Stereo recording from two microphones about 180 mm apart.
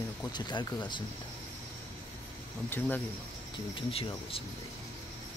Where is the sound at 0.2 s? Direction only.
25° left (ahead or behind).